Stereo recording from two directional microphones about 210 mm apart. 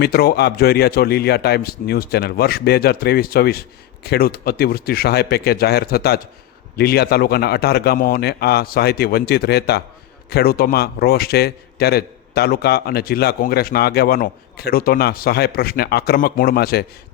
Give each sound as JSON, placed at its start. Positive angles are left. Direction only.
{"t": 0.0, "sound": "a man's voice", "side_deg": 50}